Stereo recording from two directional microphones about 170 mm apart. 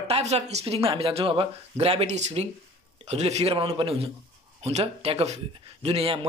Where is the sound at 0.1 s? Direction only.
40° right (ahead or behind).